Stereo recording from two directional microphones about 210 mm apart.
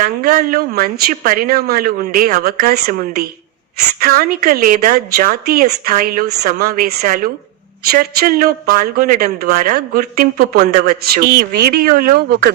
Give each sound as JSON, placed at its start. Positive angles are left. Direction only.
{"t": 0.0, "sound": "a man's voice", "side_deg": -45}